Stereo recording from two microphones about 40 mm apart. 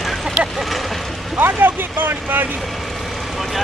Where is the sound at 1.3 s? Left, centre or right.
Right.